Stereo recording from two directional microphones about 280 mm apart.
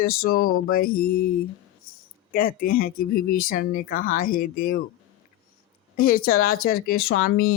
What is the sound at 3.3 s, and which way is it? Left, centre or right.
Speech, left.